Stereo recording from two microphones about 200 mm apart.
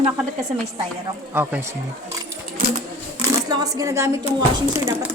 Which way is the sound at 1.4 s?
10° right (ahead or behind).